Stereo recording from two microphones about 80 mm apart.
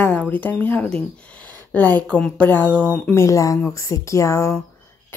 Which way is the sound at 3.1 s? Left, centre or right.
Left.